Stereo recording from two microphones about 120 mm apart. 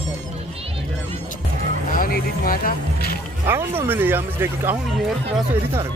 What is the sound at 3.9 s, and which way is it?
Speech, 15° right (ahead or behind).